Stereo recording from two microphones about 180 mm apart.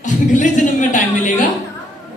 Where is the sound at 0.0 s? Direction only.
45° left (ahead or behind).